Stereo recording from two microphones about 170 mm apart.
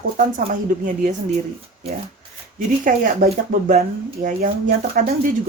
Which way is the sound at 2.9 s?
55° right (ahead or behind).